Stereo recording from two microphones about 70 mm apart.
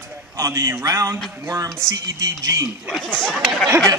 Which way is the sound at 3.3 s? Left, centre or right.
Centre.